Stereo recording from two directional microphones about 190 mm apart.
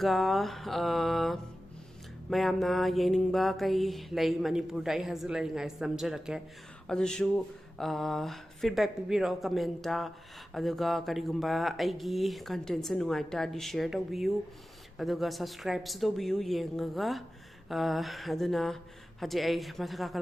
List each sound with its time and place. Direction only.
0.0 s mantra: centre (ahead or behind)